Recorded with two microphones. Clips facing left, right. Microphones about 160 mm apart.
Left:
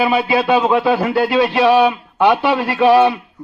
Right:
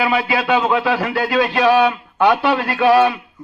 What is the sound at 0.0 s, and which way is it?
Speech, 25° left (ahead or behind).